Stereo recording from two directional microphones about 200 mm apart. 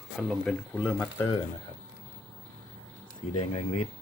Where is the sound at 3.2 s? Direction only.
35° left (ahead or behind).